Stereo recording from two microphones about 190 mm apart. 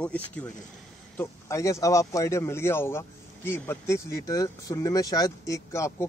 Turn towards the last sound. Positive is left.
turn(degrees=15)  # may be behind; listen again after turning